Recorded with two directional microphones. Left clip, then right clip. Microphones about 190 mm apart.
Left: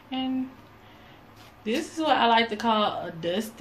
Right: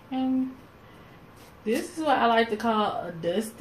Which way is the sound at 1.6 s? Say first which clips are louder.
Even; 5° left (ahead or behind).